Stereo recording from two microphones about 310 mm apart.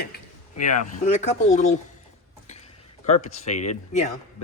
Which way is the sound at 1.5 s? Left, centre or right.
Left.